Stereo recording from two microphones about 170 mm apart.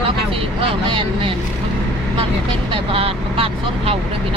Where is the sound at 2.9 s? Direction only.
35° right (ahead or behind).